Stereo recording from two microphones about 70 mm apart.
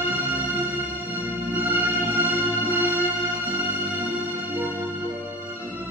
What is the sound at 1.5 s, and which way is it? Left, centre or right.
Music, right.